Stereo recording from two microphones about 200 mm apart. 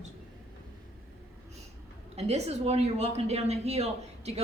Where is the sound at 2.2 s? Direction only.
30° right (ahead or behind).